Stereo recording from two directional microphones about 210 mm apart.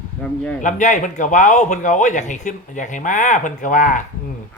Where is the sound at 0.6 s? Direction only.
35° left (ahead or behind).